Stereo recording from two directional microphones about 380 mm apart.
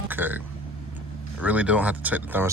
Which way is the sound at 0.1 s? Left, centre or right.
Centre.